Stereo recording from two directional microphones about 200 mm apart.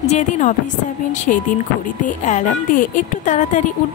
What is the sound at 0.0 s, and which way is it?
Speech, 35° left (ahead or behind).